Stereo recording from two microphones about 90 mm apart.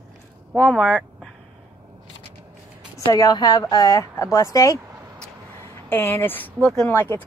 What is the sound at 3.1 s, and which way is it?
Speech, 45° left (ahead or behind).